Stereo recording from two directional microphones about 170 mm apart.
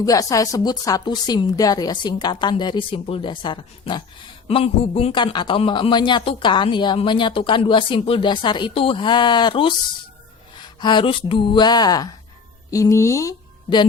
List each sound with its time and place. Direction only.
0.0 s a man's voice: 20° left (ahead or behind)
10.8 s a man's voice: 25° left (ahead or behind)